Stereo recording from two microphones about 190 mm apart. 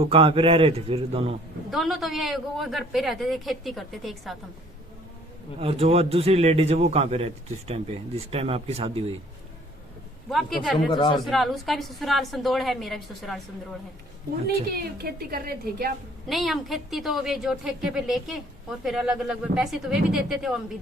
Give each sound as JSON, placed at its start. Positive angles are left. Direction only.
{"t": 0.0, "sound": "speech", "side_deg": -30}
{"t": 1.7, "sound": "a man's voice", "side_deg": 0}
{"t": 5.5, "sound": "speech", "side_deg": -30}
{"t": 8.3, "sound": "speech", "side_deg": -30}
{"t": 10.2, "sound": "a man's voice", "side_deg": 0}
{"t": 10.9, "sound": "speech", "side_deg": 25}
{"t": 11.2, "sound": "a man's voice", "side_deg": 0}
{"t": 14.4, "sound": "a woman's voice", "side_deg": -55}
{"t": 16.2, "sound": "a man's voice", "side_deg": 0}